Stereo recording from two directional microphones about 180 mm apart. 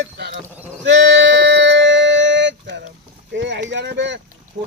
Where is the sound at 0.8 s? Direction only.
75° right (ahead or behind).